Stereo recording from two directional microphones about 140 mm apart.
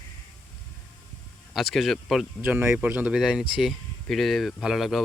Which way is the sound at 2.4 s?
15° right (ahead or behind).